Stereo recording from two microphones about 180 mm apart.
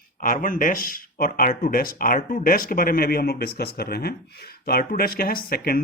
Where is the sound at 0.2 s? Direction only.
50° left (ahead or behind).